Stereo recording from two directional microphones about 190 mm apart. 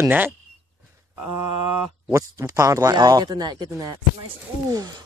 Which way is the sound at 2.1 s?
15° right (ahead or behind).